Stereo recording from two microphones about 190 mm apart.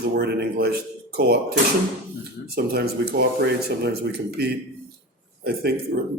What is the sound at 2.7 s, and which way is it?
Speech, 60° right (ahead or behind).